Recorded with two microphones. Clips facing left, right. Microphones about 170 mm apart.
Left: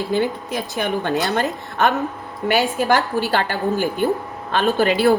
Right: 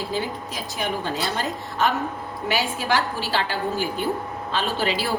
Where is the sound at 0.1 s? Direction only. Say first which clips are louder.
Left 7 dB; 60° left (ahead or behind).